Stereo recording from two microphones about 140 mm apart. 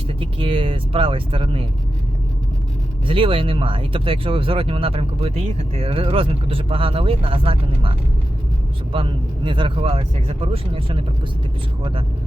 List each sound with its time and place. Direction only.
0.1 s speech: 40° right (ahead or behind)
3.1 s speech: 40° right (ahead or behind)